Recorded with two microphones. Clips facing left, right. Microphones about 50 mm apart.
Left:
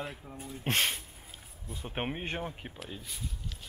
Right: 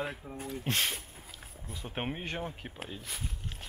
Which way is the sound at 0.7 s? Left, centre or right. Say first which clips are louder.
Left 3 dB; left.